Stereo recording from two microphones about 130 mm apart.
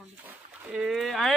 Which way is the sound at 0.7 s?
5° right (ahead or behind).